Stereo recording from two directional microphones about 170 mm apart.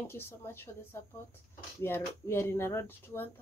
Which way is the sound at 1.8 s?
15° left (ahead or behind).